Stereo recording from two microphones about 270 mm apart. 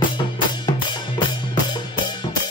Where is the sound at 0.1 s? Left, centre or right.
Centre.